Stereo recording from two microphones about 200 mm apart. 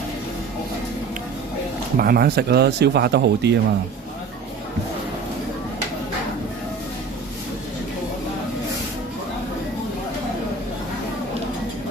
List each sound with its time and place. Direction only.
2.0 s speech: 50° right (ahead or behind)